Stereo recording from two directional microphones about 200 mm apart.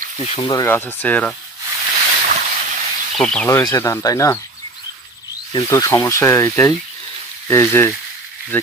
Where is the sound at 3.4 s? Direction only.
15° left (ahead or behind).